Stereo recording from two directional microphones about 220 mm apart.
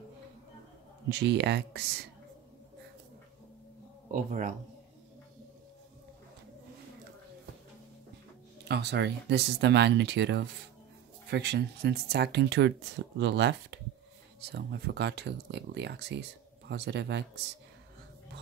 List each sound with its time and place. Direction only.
1.0 s speech: 50° right (ahead or behind)
4.1 s speech: 35° right (ahead or behind)
8.6 s speech: 50° right (ahead or behind)